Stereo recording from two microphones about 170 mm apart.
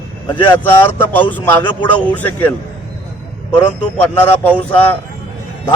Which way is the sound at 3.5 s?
10° left (ahead or behind).